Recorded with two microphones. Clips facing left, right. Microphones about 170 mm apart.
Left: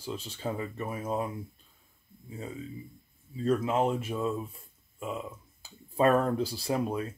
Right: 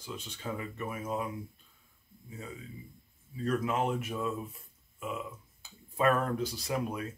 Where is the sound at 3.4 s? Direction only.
25° left (ahead or behind).